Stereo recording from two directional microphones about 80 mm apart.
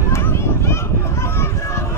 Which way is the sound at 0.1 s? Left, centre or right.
Left.